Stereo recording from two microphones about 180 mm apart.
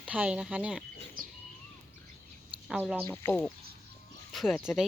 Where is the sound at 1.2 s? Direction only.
55° right (ahead or behind).